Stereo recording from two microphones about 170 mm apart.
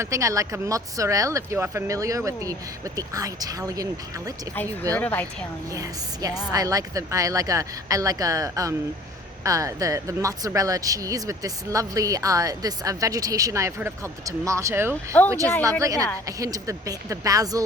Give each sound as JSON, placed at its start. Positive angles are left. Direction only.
{"t": 0.0, "sound": "a woman's voice", "side_deg": -20}
{"t": 4.5, "sound": "speech", "side_deg": 10}
{"t": 5.7, "sound": "a woman's voice", "side_deg": -20}
{"t": 15.1, "sound": "speech", "side_deg": 10}
{"t": 15.8, "sound": "a woman's voice", "side_deg": -20}